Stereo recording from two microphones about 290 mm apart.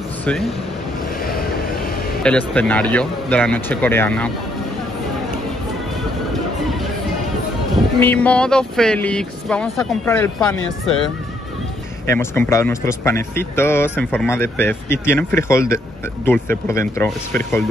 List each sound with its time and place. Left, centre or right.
0.2 s speech: centre
1.2 s vehicle: left
2.2 s speech: centre
8.0 s speech: centre
12.1 s speech: centre